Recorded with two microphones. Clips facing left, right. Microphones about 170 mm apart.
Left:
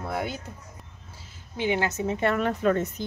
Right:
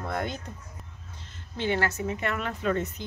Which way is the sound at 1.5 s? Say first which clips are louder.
Left 2 dB; 15° left (ahead or behind).